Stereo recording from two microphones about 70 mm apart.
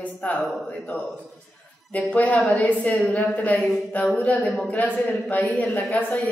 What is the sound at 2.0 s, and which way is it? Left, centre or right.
A man's voice, centre.